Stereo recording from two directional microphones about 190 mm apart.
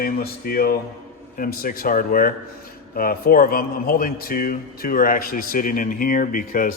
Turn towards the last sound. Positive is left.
turn(degrees=45)  # may be behind; listen again after turning